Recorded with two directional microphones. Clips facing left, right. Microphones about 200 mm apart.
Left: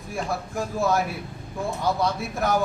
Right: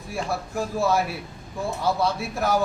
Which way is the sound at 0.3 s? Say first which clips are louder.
Right 2 dB; 5° right (ahead or behind).